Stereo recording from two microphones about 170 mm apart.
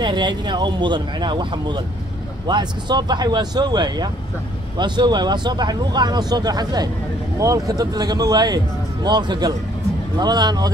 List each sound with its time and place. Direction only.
0.0 s speech: 25° right (ahead or behind)